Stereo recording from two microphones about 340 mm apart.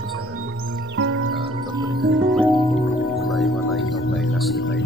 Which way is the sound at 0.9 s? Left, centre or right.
Right.